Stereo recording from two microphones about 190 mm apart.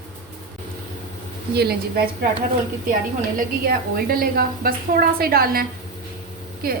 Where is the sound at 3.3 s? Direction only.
50° right (ahead or behind).